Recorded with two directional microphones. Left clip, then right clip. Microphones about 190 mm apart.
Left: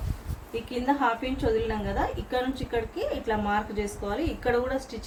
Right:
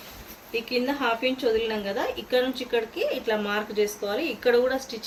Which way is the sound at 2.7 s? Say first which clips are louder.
Right 2 dB; 30° left (ahead or behind).